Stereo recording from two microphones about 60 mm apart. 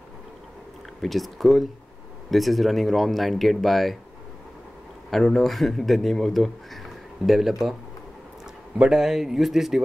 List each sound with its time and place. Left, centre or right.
1.0 s speech: centre
5.1 s speech: centre
8.7 s speech: centre